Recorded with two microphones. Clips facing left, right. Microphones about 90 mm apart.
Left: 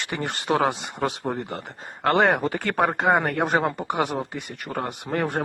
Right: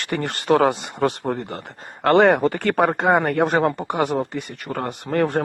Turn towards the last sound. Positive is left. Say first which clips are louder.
# right 5 dB
turn(degrees=5)  # may be behind; listen again after turning